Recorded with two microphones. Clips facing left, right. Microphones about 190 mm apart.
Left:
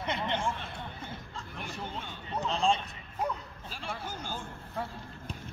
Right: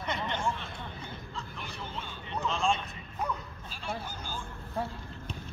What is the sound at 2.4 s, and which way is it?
Vehicle, 35° left (ahead or behind).